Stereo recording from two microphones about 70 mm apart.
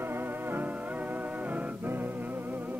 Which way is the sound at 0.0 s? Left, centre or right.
Right.